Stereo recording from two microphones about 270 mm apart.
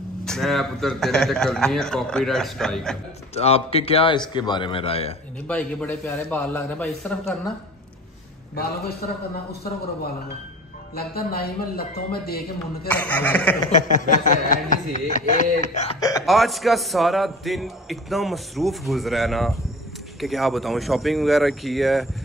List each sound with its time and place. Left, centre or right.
0.2 s a man's voice: centre
3.3 s a man's voice: left
5.5 s a man's voice: centre
11.0 s a man's voice: left
12.8 s a sound: centre
13.7 s a man's voice: left
16.0 s a sound: centre
16.3 s a man's voice: centre